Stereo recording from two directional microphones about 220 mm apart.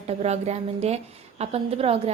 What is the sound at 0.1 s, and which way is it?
A woman's voice, 30° right (ahead or behind).